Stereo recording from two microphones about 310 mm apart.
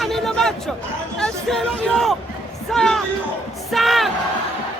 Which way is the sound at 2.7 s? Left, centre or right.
Centre.